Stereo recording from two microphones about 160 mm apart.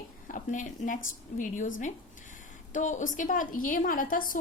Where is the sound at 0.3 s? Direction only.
55° left (ahead or behind).